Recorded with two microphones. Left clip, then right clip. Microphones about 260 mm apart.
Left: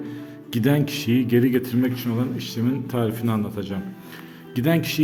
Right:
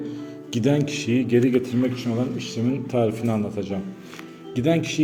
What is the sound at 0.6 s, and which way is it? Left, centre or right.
A man's voice, left.